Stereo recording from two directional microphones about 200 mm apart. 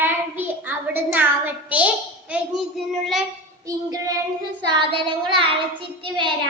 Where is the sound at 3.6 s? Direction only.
15° right (ahead or behind).